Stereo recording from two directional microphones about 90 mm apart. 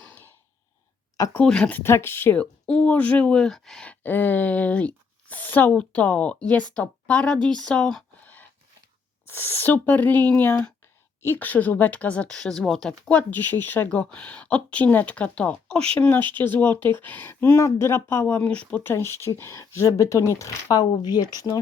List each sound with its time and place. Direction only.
1.4 s speech: 10° left (ahead or behind)
1.8 s speech: 25° left (ahead or behind)
2.4 s speech: 10° left (ahead or behind)
3.8 s speech: 20° left (ahead or behind)
8.2 s a sound: 20° left (ahead or behind)
9.2 s speech: 25° left (ahead or behind)
16.0 s speech: 20° left (ahead or behind); by 20.8 s 35° left (ahead or behind)
20.9 s speech: 50° left (ahead or behind)